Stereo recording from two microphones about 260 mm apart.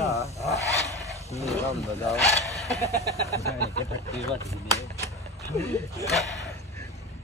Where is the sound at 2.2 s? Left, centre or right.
Left.